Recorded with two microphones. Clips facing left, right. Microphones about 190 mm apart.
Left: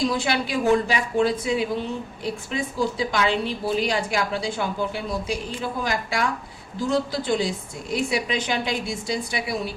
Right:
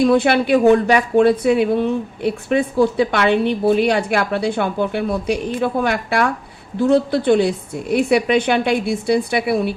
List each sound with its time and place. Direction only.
0.0 s speech: 60° right (ahead or behind)